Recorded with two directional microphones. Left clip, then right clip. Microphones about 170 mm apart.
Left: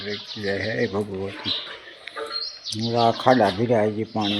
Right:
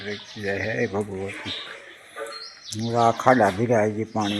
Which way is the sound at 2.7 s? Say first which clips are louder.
Even; 10° right (ahead or behind).